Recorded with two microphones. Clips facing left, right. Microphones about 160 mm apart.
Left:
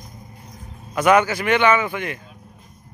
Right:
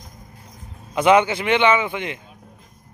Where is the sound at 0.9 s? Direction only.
20° right (ahead or behind).